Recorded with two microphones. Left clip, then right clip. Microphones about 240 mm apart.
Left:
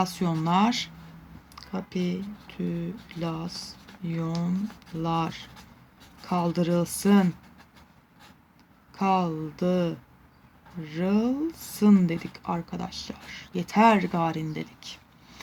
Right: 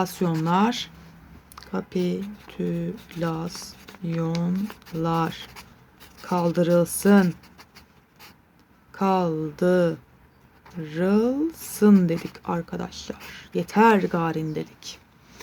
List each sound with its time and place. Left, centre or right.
0.0 s speech: centre
3.5 s speech: right
4.0 s speech: centre
8.9 s speech: centre